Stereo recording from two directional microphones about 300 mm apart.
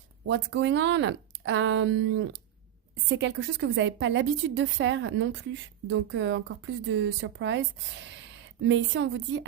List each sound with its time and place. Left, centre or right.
0.3 s a woman's voice: right
8.6 s a woman's voice: right